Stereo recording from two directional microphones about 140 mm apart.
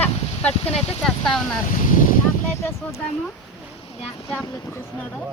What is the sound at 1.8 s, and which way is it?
Boat, 75° left (ahead or behind).